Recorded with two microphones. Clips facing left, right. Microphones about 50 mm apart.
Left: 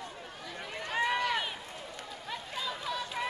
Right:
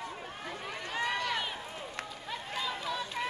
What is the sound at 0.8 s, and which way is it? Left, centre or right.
Run, centre.